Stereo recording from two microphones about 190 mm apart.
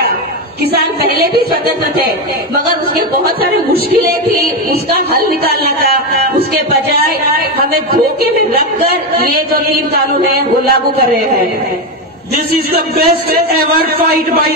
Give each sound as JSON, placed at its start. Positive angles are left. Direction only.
{"t": 1.0, "sound": "speech", "side_deg": -55}
{"t": 3.3, "sound": "a man's voice", "side_deg": -55}
{"t": 6.5, "sound": "a man's voice", "side_deg": -55}
{"t": 9.2, "sound": "a man's voice", "side_deg": -50}
{"t": 12.5, "sound": "a man's voice", "side_deg": -50}